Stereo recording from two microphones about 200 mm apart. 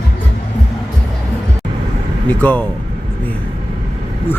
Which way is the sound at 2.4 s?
10° left (ahead or behind).